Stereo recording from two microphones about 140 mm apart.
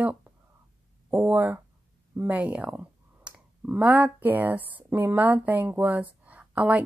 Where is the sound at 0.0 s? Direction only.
10° right (ahead or behind).